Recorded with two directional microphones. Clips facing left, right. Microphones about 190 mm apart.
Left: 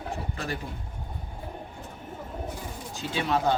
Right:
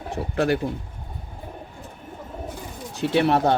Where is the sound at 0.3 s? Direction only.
70° right (ahead or behind).